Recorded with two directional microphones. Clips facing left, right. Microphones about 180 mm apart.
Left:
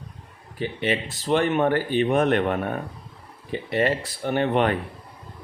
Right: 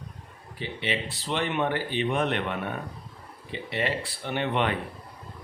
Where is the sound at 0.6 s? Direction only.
50° left (ahead or behind).